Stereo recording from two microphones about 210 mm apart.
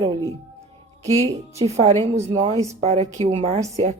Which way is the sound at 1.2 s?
30° right (ahead or behind).